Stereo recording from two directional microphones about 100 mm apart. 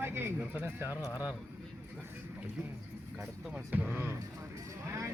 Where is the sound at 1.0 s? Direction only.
35° left (ahead or behind).